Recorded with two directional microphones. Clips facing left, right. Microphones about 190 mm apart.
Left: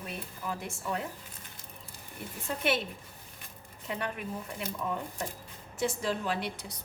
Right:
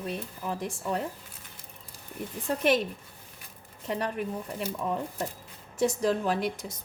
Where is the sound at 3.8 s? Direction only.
35° right (ahead or behind).